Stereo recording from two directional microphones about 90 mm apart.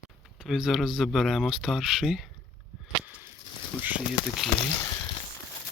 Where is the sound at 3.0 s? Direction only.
20° right (ahead or behind).